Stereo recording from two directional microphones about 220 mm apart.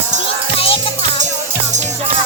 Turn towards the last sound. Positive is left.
turn(degrees=25)  # may be behind; listen again after turning